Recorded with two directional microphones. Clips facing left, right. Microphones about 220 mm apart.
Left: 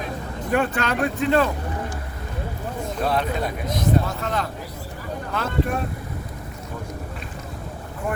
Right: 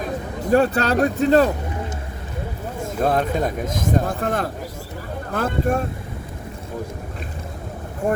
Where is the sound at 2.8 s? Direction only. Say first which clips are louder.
Right 4 dB; 45° right (ahead or behind).